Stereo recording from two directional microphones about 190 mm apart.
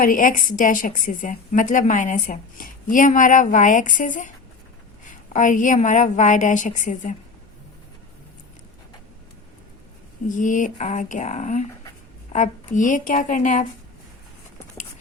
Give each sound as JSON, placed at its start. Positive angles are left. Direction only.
{"t": 0.0, "sound": "a woman's voice", "side_deg": 45}
{"t": 5.3, "sound": "a woman's voice", "side_deg": 40}
{"t": 10.2, "sound": "a woman's voice", "side_deg": 40}